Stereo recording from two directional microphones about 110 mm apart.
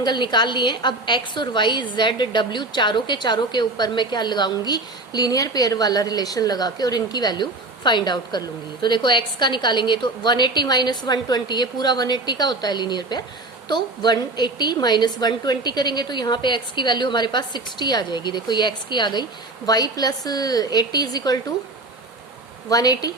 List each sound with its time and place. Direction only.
0.0 s a woman's voice: 45° left (ahead or behind)
22.7 s a woman's voice: 35° left (ahead or behind)